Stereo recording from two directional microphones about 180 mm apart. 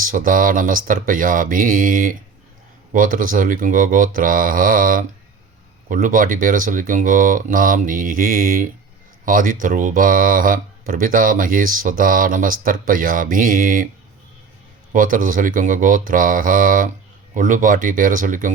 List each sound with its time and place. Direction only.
0.1 s speech: 50° right (ahead or behind)
14.9 s speech: 50° right (ahead or behind)